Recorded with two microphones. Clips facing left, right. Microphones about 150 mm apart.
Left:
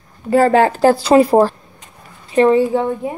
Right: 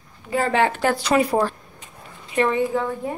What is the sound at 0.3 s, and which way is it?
A woman's voice, 40° left (ahead or behind).